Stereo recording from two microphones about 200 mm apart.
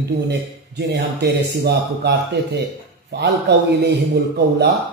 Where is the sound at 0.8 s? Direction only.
55° right (ahead or behind).